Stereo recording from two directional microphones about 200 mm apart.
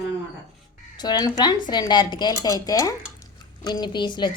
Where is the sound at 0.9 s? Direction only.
20° left (ahead or behind).